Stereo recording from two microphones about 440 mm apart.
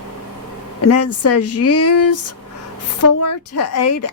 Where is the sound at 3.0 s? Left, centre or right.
Left.